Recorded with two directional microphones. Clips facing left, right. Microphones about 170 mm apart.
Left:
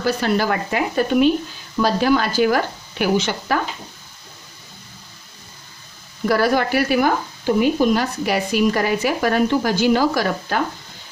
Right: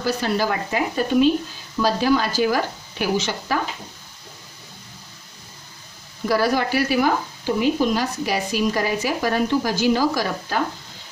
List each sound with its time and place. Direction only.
0.0 s speech: 65° left (ahead or behind)
6.2 s speech: 60° left (ahead or behind)